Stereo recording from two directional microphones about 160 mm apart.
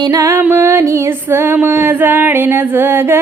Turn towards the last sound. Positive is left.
turn(degrees=-15)  # may be behind; listen again after turning